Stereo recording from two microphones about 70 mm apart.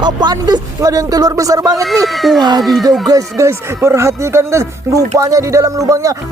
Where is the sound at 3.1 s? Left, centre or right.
Right.